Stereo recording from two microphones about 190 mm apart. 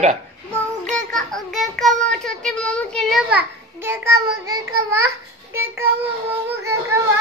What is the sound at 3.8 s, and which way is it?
A child's voice, 15° right (ahead or behind).